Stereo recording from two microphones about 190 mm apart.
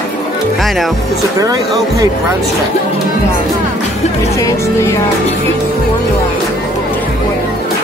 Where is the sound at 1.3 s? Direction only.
20° right (ahead or behind).